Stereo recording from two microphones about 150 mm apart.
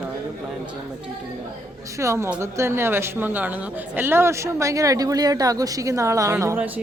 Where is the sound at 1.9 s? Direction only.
20° right (ahead or behind).